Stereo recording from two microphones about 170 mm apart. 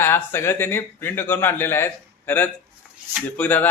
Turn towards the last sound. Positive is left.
turn(degrees=10)  # may be behind; listen again after turning